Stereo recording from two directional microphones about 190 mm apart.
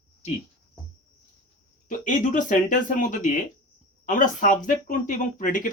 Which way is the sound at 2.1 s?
40° left (ahead or behind).